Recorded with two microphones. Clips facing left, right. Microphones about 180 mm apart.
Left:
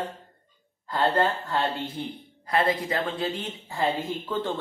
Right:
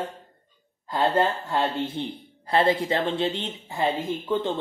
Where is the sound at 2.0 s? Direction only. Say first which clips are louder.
Right 3 dB; 30° right (ahead or behind).